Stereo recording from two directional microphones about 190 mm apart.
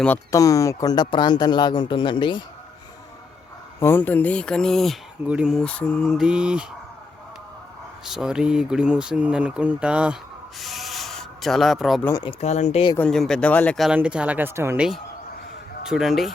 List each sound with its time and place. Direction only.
0.0 s speech: 10° left (ahead or behind)
3.8 s speech: 10° left (ahead or behind); by 6.7 s 5° right (ahead or behind)
8.0 s speech: 5° right (ahead or behind)
10.6 s rub: centre (ahead or behind)
12.2 s speech: 35° left (ahead or behind)
13.0 s speech: 5° left (ahead or behind); by 14.8 s 15° right (ahead or behind)
15.9 s speech: centre (ahead or behind)